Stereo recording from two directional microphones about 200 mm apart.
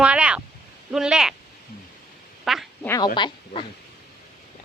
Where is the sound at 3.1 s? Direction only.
25° left (ahead or behind).